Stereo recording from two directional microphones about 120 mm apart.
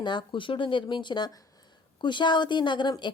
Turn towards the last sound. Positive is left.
turn(degrees=40)  # may be behind; listen again after turning